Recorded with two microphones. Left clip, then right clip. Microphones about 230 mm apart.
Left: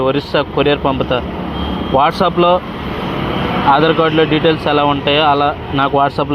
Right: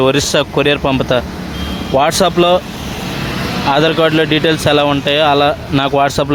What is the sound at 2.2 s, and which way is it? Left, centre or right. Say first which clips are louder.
Speech: right 1 dB; right.